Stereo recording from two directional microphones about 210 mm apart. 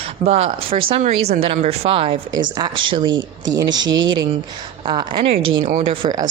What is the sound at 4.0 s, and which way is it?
Speech, 20° right (ahead or behind).